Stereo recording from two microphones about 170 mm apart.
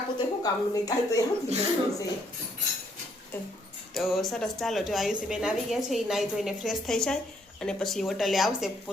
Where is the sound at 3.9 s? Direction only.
Centre (ahead or behind).